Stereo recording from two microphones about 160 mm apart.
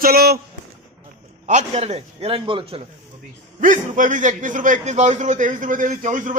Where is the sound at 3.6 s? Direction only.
55° right (ahead or behind).